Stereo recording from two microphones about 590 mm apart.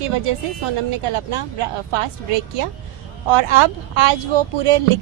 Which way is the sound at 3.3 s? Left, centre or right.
Right.